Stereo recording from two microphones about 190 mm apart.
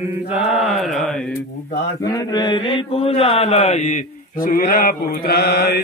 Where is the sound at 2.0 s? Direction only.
20° left (ahead or behind).